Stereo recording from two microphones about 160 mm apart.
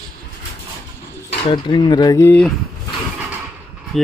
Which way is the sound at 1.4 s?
30° left (ahead or behind).